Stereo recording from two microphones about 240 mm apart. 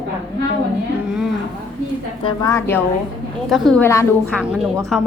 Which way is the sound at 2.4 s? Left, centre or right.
Centre.